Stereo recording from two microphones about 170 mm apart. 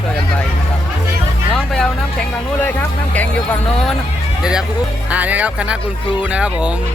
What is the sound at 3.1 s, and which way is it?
Speech, 5° left (ahead or behind).